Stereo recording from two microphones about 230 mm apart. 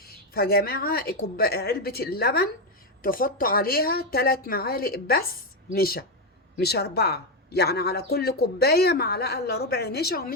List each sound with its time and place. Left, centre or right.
0.0 s a woman's voice: left